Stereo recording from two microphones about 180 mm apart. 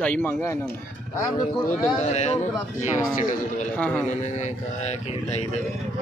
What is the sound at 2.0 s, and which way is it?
Speech, 40° left (ahead or behind).